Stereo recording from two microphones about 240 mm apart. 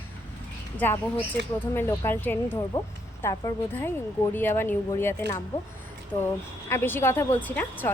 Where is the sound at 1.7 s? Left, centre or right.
Centre.